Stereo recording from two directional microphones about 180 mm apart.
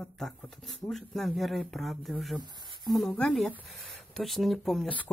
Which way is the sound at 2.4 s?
25° right (ahead or behind).